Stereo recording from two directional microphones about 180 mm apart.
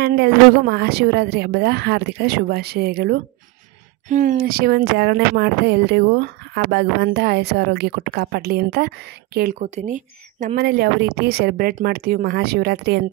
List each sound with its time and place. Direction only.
0.0 s speech: 65° right (ahead or behind)
4.1 s speech: 45° right (ahead or behind)
9.6 s speech: 40° right (ahead or behind); by 13.0 s 65° right (ahead or behind)